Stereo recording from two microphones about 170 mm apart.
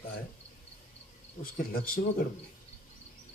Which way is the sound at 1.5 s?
55° left (ahead or behind).